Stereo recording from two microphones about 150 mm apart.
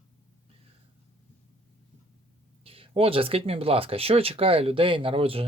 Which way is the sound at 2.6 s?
40° right (ahead or behind).